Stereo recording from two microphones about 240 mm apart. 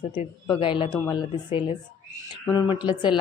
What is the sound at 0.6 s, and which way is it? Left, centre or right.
Speech, left.